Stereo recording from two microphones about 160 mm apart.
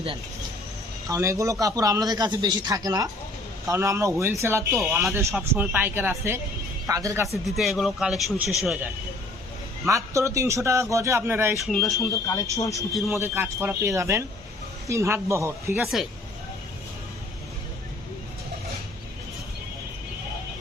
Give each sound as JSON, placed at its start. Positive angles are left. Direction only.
{"t": 1.0, "sound": "a man's voice", "side_deg": -20}
{"t": 7.4, "sound": "a man's voice", "side_deg": 0}
{"t": 9.8, "sound": "speech", "side_deg": -20}
{"t": 11.5, "sound": "a man's voice", "side_deg": 0}
{"t": 12.3, "sound": "speech", "side_deg": 20}
{"t": 13.1, "sound": "speech", "side_deg": -15}
{"t": 15.8, "sound": "a man's voice", "side_deg": 0}